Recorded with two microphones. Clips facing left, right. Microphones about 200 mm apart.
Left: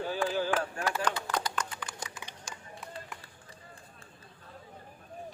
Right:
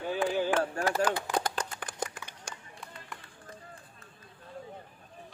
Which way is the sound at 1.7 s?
55° right (ahead or behind).